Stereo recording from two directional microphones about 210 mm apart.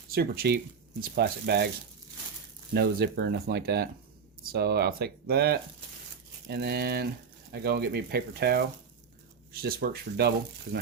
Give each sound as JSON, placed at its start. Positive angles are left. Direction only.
{"t": 0.1, "sound": "speech", "side_deg": -45}
{"t": 2.7, "sound": "speech", "side_deg": -50}